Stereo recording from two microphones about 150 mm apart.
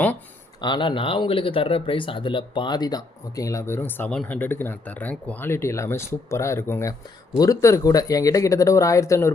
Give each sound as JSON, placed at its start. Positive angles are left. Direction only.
{"t": 0.6, "sound": "speech", "side_deg": 30}